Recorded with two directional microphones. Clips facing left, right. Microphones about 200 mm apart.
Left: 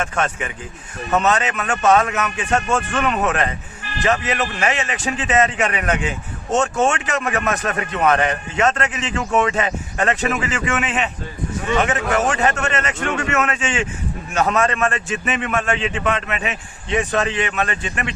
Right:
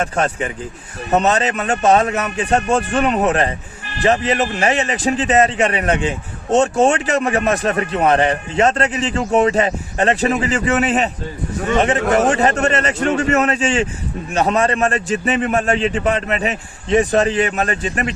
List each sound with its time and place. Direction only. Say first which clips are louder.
0.0 s a man's voice: right 3 dB; 35° right (ahead or behind)